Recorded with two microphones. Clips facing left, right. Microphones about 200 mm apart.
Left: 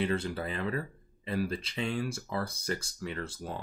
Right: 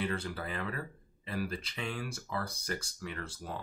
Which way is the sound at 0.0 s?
25° left (ahead or behind).